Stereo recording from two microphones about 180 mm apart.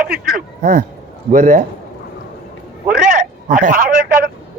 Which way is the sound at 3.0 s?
50° right (ahead or behind).